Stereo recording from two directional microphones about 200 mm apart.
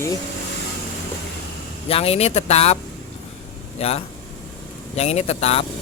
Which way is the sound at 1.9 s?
30° left (ahead or behind).